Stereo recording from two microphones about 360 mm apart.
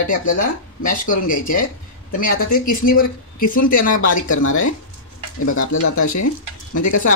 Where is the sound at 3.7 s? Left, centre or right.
Left.